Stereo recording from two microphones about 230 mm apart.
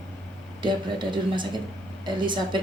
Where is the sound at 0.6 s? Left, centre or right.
Centre.